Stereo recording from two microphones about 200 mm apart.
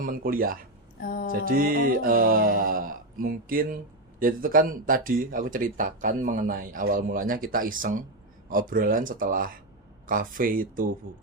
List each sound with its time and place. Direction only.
0.0 s speech: 45° right (ahead or behind)
0.9 s a sound: 50° left (ahead or behind)
1.3 s speech: 45° right (ahead or behind)